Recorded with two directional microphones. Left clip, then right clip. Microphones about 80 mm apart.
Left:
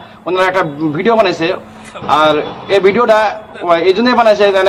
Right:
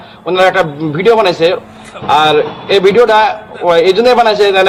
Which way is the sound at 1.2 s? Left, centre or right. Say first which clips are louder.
Right 4 dB; left.